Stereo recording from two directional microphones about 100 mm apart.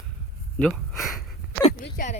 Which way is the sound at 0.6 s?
5° left (ahead or behind).